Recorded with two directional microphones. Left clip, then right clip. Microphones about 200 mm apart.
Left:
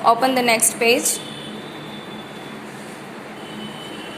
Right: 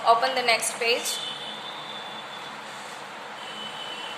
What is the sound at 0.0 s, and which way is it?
Speech, 25° left (ahead or behind).